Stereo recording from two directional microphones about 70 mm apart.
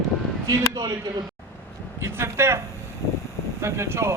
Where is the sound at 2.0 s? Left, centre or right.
Right.